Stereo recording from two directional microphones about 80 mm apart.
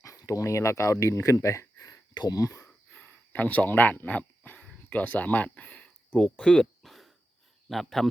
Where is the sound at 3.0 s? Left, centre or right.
Left; by 8.0 s centre.